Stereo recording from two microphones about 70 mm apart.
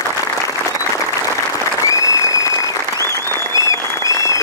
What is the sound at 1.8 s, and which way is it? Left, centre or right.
Applause, left.